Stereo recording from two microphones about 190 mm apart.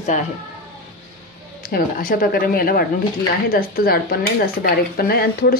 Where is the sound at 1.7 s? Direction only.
45° left (ahead or behind).